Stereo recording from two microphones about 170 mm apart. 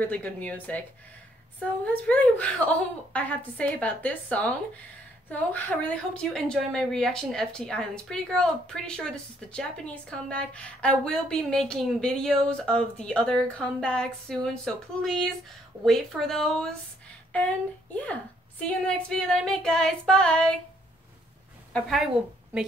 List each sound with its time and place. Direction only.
0.0 s a woman's voice: 10° left (ahead or behind)
18.6 s a woman's voice: 5° left (ahead or behind)
21.7 s a woman's voice: centre (ahead or behind)